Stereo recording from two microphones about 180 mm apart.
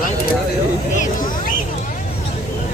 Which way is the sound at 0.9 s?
45° left (ahead or behind).